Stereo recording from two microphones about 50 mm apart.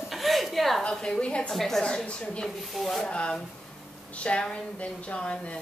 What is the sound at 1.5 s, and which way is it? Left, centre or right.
Speech, centre.